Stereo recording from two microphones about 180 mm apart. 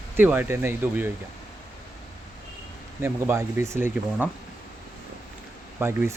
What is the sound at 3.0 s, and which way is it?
Speech, 15° right (ahead or behind).